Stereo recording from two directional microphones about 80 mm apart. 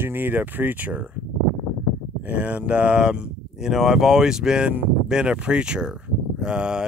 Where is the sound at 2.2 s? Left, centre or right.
Centre.